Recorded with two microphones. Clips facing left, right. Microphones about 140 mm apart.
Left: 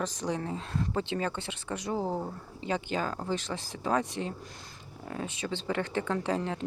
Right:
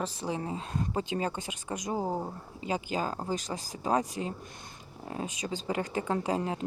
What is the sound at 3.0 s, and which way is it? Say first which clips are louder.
Speech: even; 35° right (ahead or behind).